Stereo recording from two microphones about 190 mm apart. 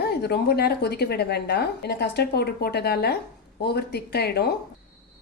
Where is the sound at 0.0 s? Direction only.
55° left (ahead or behind).